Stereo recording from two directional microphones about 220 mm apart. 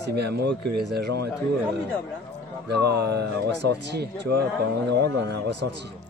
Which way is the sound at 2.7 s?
50° right (ahead or behind).